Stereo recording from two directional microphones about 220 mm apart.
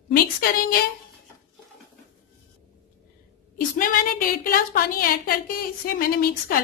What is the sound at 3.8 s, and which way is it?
A woman's voice, 40° left (ahead or behind).